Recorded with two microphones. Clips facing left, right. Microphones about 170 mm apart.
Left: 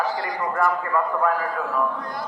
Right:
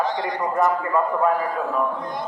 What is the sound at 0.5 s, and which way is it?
A man's voice, 20° right (ahead or behind).